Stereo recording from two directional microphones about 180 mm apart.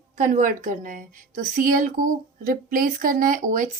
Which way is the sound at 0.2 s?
45° right (ahead or behind).